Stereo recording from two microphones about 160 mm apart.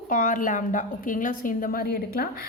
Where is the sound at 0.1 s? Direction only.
55° left (ahead or behind).